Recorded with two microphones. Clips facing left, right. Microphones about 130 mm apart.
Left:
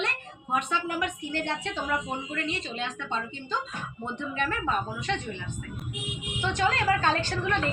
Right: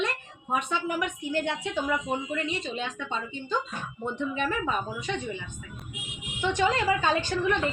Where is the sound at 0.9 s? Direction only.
5° right (ahead or behind).